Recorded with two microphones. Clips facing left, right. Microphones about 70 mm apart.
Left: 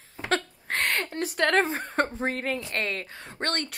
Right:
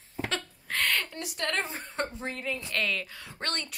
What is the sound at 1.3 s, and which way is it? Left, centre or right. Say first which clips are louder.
Speech: left 9 dB; left.